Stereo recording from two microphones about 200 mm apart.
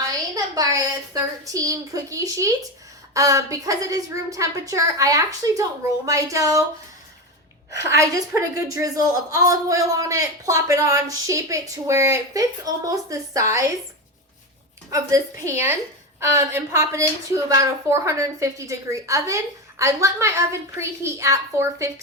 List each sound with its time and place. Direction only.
0.1 s a man's voice: 20° right (ahead or behind)
7.7 s a man's voice: 15° right (ahead or behind)
14.8 s a man's voice: 15° right (ahead or behind)